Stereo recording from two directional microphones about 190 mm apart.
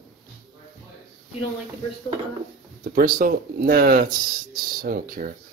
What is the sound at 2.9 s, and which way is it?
Speech, 50° right (ahead or behind).